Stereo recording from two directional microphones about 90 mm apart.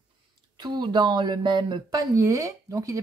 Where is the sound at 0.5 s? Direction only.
55° right (ahead or behind).